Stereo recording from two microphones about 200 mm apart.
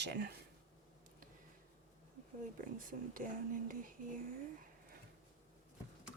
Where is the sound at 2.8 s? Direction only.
45° right (ahead or behind).